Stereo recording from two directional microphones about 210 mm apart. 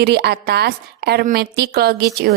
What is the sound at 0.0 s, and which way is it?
A woman's voice, 50° right (ahead or behind).